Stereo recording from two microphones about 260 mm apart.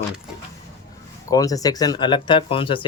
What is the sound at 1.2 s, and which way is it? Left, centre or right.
Speech, centre.